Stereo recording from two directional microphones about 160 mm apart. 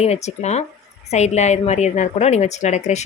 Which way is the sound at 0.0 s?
45° left (ahead or behind).